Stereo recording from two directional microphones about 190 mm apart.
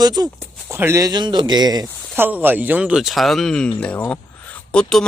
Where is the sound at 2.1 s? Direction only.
10° right (ahead or behind).